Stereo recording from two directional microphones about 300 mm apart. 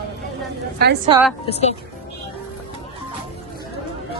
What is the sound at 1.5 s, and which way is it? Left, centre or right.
Speech, left.